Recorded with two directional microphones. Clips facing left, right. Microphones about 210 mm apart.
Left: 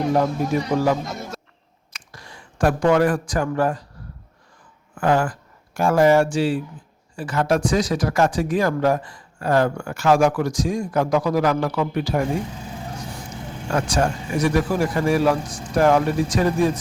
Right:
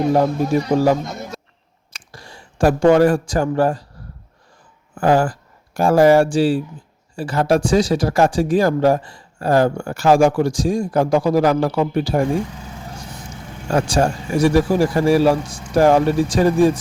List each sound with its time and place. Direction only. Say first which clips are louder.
0.1 s a man's voice: right 3 dB; 30° right (ahead or behind)
4.9 s speech: right 4 dB; 30° right (ahead or behind)
13.7 s speech: right 4 dB; 30° right (ahead or behind)